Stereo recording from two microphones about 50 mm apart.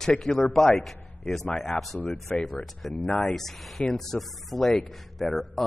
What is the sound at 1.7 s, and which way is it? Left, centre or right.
Speech, centre.